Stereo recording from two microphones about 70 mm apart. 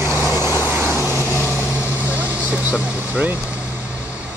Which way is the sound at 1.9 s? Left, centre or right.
Right.